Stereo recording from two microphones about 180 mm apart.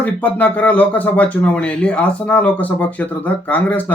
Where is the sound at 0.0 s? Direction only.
10° left (ahead or behind).